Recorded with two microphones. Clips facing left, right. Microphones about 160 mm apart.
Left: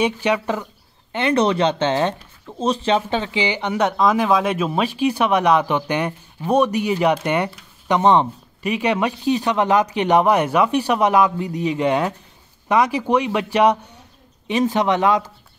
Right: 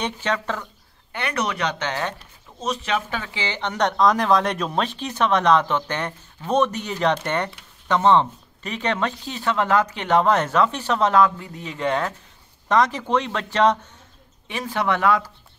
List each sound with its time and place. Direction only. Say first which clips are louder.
0.0 s speech: left 6 dB; 15° left (ahead or behind)
1.1 s speech: left 9 dB; 25° left (ahead or behind)
3.4 s speech: left 3 dB; 10° left (ahead or behind)